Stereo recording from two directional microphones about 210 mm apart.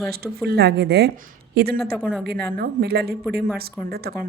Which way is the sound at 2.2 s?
50° right (ahead or behind).